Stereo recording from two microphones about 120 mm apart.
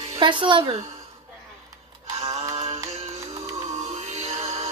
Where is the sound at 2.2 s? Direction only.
60° right (ahead or behind).